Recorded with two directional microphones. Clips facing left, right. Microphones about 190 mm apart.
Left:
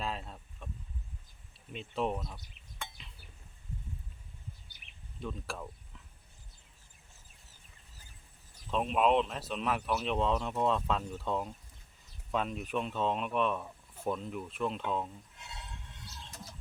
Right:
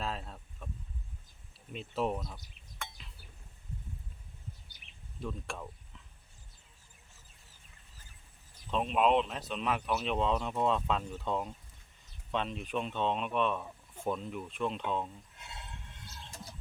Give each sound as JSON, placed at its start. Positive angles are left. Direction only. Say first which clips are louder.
{"t": 0.0, "sound": "a sound", "louder": "even", "side_deg": 0}
{"t": 1.7, "sound": "speech", "louder": "even", "side_deg": 0}
{"t": 5.2, "sound": "speech", "louder": "even", "side_deg": 0}
{"t": 8.7, "sound": "speech", "louder": "even", "side_deg": 0}